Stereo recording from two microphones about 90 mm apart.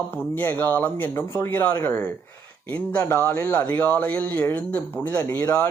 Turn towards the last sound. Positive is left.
turn(degrees=35)  # may be behind; listen again after turning